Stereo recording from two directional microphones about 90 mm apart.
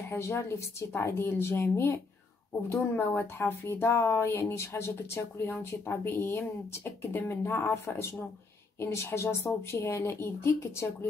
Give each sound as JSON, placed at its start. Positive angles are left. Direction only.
{"t": 0.1, "sound": "speech", "side_deg": 30}